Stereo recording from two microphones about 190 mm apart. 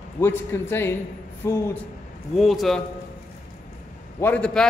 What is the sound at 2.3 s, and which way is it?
Speech, centre (ahead or behind).